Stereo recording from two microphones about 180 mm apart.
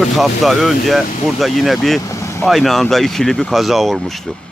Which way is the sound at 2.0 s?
15° left (ahead or behind).